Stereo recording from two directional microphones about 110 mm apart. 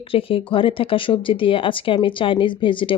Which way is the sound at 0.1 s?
55° left (ahead or behind).